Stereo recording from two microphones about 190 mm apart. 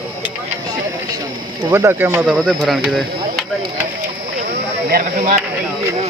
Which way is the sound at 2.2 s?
Centre (ahead or behind).